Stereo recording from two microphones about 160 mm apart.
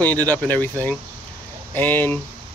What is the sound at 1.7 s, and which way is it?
Speech, 15° left (ahead or behind).